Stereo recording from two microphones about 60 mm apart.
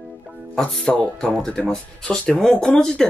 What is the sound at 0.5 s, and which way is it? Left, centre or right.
Speech, centre.